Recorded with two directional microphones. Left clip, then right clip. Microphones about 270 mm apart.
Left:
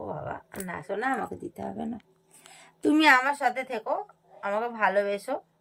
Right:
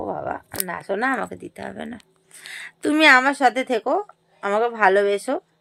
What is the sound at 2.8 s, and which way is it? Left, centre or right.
A woman's voice, centre.